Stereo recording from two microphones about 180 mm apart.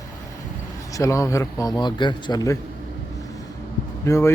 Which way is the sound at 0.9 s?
15° left (ahead or behind).